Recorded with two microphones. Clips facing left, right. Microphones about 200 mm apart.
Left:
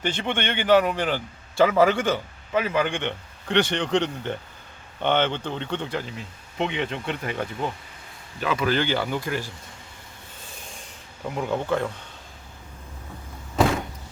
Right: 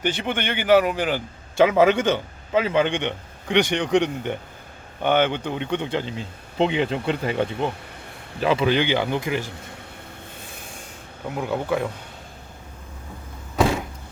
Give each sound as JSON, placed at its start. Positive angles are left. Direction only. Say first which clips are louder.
{"t": 0.0, "sound": "a man's voice", "louder": "right 1 dB", "side_deg": -5}
{"t": 1.5, "sound": "a man's voice", "louder": "right 2 dB", "side_deg": -20}
{"t": 8.7, "sound": "a man's voice", "louder": "right 3 dB", "side_deg": -15}
{"t": 11.3, "sound": "speech", "louder": "right 1 dB", "side_deg": -5}